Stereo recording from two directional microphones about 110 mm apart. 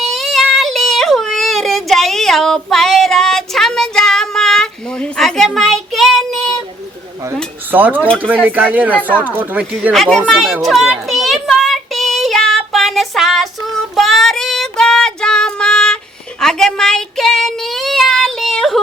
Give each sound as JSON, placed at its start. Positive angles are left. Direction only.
{"t": 0.0, "sound": "yodeling", "side_deg": 0}
{"t": 5.5, "sound": "child singing", "side_deg": 0}
{"t": 7.7, "sound": "speech", "side_deg": -15}
{"t": 9.9, "sound": "speech", "side_deg": 0}
{"t": 10.6, "sound": "child singing", "side_deg": 0}